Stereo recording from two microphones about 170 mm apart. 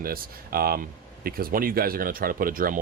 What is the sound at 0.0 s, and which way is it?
Speech, 60° right (ahead or behind).